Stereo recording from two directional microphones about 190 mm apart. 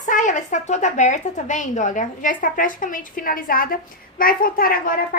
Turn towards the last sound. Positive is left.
turn(degrees=50)  # may be behind; listen again after turning